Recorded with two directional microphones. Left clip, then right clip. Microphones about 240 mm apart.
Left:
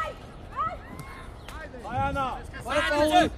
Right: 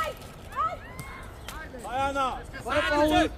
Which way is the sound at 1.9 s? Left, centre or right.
Right.